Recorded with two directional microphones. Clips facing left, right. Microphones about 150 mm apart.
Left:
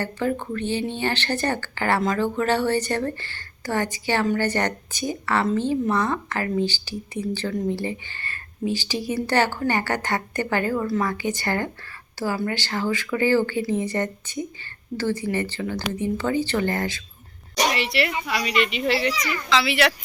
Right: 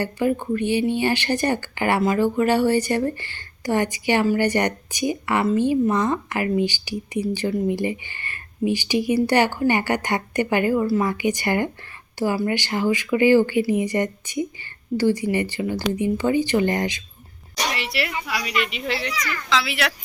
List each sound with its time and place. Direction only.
0.0 s speech: 10° right (ahead or behind)
17.7 s a child's voice: centre (ahead or behind)